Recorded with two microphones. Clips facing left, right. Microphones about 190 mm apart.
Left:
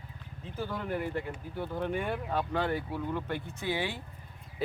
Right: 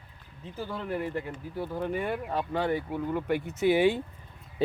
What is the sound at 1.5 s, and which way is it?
Speech, 5° right (ahead or behind).